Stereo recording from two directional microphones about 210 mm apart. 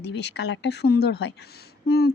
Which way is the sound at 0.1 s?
55° left (ahead or behind).